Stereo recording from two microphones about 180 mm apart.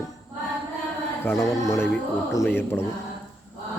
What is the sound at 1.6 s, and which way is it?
Choir, 15° left (ahead or behind).